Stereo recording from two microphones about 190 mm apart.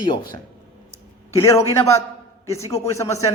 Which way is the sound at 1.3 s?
15° left (ahead or behind).